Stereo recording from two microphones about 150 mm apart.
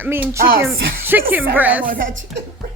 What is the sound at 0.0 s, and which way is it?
A woman's voice, 15° right (ahead or behind).